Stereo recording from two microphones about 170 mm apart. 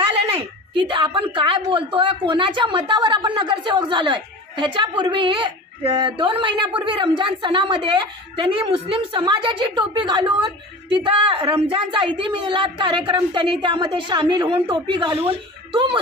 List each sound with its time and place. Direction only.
0.0 s a woman's voice: 30° right (ahead or behind)